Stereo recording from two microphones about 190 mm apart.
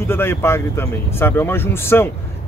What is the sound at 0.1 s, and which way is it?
Speech, 10° left (ahead or behind).